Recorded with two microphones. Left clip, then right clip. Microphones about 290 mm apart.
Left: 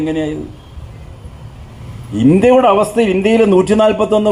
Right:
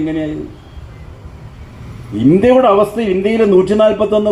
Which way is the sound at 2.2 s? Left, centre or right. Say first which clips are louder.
Even; left.